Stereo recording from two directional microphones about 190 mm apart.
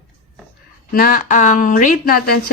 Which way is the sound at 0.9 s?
50° left (ahead or behind).